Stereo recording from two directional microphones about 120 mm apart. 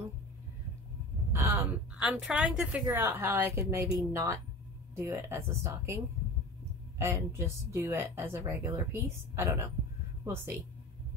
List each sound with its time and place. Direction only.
1.3 s gasp: 20° right (ahead or behind)
2.0 s a woman's voice: 5° right (ahead or behind); by 5.9 s 25° right (ahead or behind)
7.0 s speech: 25° right (ahead or behind)